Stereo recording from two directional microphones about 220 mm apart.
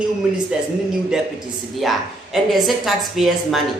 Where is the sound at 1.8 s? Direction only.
Centre (ahead or behind).